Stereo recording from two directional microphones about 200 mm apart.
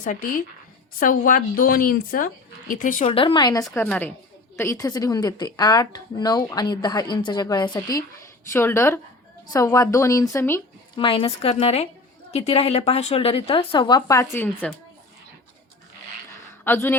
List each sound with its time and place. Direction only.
0.0 s speech: 40° left (ahead or behind)
3.1 s speech: 25° left (ahead or behind)
3.8 s speech: 5° left (ahead or behind)
10.9 s speech: 25° left (ahead or behind)
16.6 s speech: 10° left (ahead or behind)